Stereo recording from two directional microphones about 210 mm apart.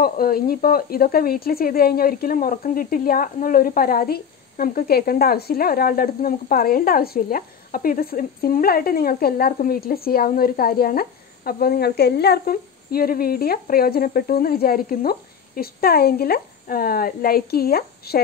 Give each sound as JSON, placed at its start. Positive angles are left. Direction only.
{"t": 0.0, "sound": "speech", "side_deg": 45}